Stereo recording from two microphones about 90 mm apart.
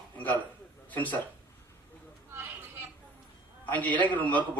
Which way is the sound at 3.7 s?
20° left (ahead or behind).